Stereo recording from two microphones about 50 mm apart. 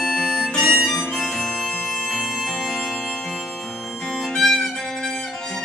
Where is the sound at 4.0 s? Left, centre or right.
Centre.